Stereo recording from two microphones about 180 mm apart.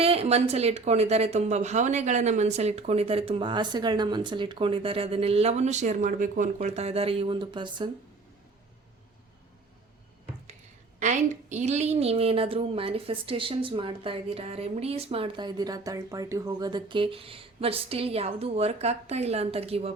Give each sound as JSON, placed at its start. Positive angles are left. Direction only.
{"t": 0.0, "sound": "a woman's voice", "side_deg": -35}
{"t": 11.0, "sound": "a woman's voice", "side_deg": -40}